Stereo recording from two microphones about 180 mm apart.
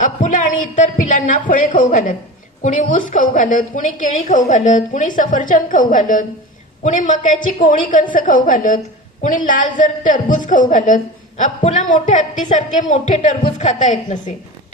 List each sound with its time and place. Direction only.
0.0 s a woman's voice: 45° left (ahead or behind)